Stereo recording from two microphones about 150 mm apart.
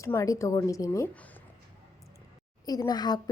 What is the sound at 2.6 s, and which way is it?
Speech, 25° left (ahead or behind).